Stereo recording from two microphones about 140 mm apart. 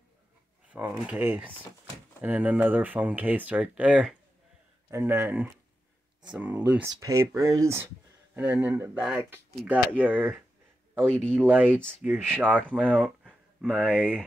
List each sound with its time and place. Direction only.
0.7 s speech: 10° right (ahead or behind)
4.9 s speech: 15° right (ahead or behind)
11.0 s speech: 5° left (ahead or behind)
11.4 s speech: 15° right (ahead or behind)
12.9 s a sound: 10° right (ahead or behind)
13.9 s speech: 10° right (ahead or behind)